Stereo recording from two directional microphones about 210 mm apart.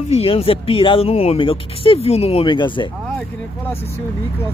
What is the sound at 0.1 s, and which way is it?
Speech, 30° left (ahead or behind).